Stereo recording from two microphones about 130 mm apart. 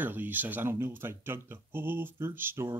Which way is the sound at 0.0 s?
15° right (ahead or behind).